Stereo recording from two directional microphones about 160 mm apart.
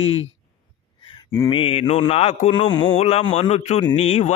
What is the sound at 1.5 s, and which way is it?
Mantra, 35° left (ahead or behind).